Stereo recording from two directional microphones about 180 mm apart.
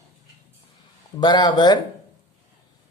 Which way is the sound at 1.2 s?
25° left (ahead or behind).